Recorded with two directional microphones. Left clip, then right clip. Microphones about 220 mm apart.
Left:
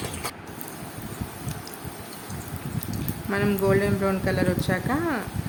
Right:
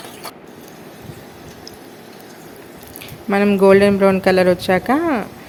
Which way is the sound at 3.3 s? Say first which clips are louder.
Right 11 dB; 30° right (ahead or behind).